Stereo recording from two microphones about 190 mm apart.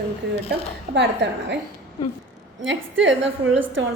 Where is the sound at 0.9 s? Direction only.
65° right (ahead or behind).